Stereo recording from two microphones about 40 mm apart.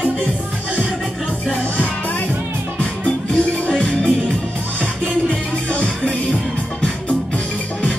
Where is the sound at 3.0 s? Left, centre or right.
Left.